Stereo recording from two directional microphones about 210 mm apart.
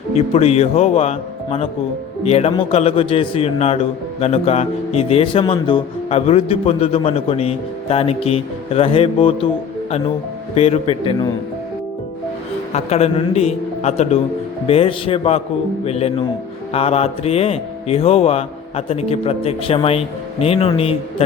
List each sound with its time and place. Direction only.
0.2 s speech: 30° left (ahead or behind)
10.5 s speech: 30° left (ahead or behind)
12.7 s a man's voice: 30° left (ahead or behind)